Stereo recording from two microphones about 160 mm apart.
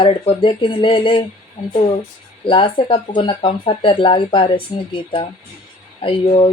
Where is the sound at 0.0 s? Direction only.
35° left (ahead or behind).